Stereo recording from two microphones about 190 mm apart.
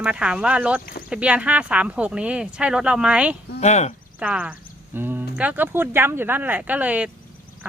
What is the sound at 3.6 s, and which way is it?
Speech, 35° left (ahead or behind).